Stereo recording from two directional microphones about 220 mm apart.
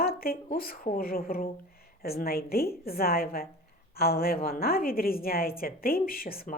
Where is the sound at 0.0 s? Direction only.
40° left (ahead or behind).